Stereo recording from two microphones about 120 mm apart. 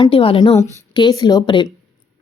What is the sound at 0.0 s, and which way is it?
Speech, 50° left (ahead or behind).